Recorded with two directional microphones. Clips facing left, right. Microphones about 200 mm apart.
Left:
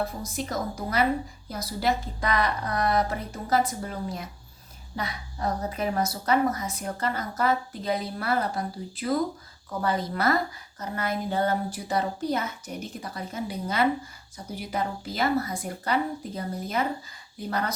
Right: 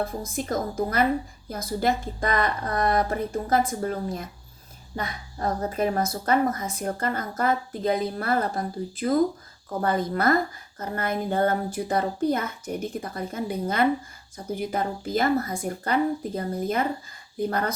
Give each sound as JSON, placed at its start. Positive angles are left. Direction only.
{"t": 0.0, "sound": "a woman's voice", "side_deg": -50}